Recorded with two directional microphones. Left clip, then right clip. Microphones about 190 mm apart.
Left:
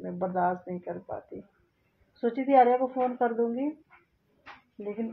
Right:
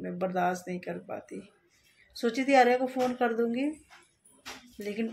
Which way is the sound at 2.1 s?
15° right (ahead or behind).